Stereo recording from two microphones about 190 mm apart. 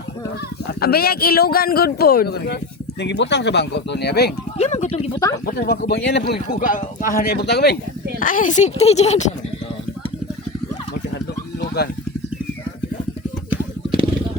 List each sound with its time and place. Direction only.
0.8 s a man's voice: 55° left (ahead or behind)
4.5 s speech: 35° left (ahead or behind)
5.9 s speech: 65° left (ahead or behind)
8.2 s speech: 45° left (ahead or behind)